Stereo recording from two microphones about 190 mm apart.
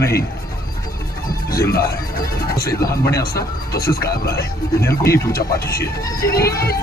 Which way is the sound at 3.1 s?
55° left (ahead or behind).